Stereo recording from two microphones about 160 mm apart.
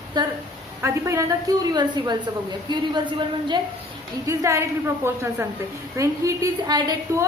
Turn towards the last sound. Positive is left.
turn(degrees=-25)  # may be behind; listen again after turning